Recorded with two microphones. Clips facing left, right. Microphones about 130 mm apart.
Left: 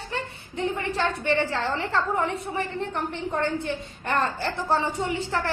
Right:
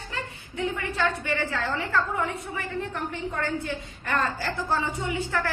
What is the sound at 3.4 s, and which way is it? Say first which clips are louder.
A woman's voice: left 4 dB; 25° left (ahead or behind).